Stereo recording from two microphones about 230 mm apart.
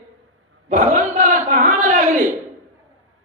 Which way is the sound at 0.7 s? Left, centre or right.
Right.